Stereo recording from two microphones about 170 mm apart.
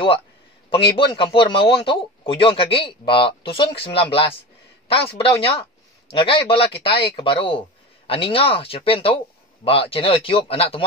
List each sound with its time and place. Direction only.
0.7 s a man's voice: 30° left (ahead or behind)